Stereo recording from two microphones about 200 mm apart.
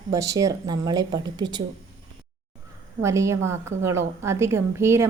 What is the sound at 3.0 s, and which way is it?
A woman's voice, 15° right (ahead or behind).